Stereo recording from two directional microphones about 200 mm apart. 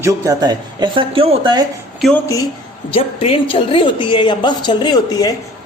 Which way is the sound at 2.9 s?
30° left (ahead or behind).